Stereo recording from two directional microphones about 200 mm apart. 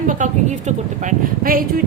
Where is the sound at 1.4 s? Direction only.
45° right (ahead or behind).